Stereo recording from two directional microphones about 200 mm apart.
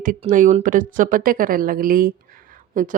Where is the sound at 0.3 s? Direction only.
40° right (ahead or behind).